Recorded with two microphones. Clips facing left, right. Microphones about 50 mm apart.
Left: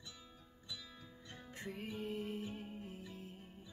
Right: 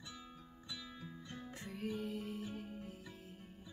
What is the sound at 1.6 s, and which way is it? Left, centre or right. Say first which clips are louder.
Music: right 1 dB; centre.